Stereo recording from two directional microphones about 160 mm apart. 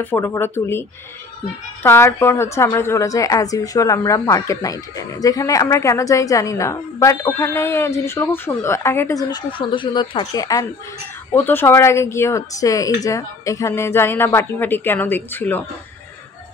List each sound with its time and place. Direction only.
0.0 s a woman's voice: 10° left (ahead or behind)